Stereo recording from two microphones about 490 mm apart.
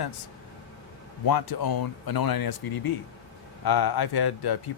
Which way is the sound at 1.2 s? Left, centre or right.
Left.